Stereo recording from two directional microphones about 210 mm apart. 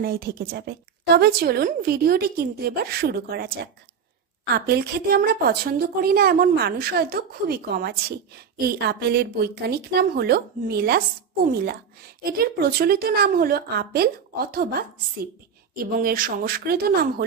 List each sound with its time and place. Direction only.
0.0 s a woman's voice: 45° right (ahead or behind)
4.6 s a woman's voice: 50° right (ahead or behind)